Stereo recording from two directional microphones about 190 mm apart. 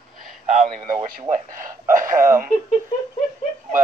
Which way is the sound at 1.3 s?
45° right (ahead or behind).